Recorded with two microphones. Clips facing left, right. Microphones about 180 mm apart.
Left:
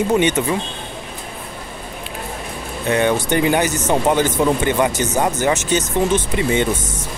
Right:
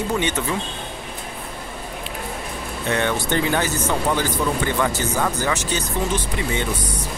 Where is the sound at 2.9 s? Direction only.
15° left (ahead or behind).